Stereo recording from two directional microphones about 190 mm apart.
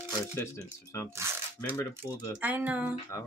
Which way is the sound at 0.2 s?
15° left (ahead or behind).